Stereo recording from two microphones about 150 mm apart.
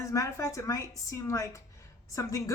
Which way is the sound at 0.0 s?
20° left (ahead or behind).